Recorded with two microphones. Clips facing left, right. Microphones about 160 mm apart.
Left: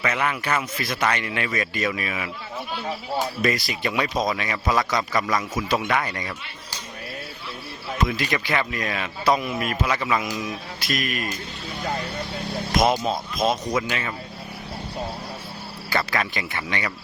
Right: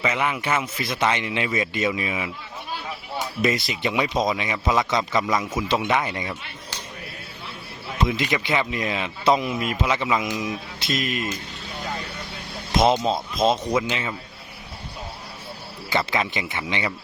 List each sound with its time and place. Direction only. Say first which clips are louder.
0.0 s speech: right 1 dB; 15° right (ahead or behind)
3.4 s speech: right 1 dB; 20° right (ahead or behind)
7.9 s speech: right 1 dB; 20° right (ahead or behind)
12.7 s speech: right 2 dB; 25° right (ahead or behind)
15.9 s speech: right 1 dB; 20° right (ahead or behind)